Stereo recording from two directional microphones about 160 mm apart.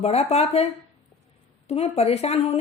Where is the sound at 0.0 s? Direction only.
40° left (ahead or behind).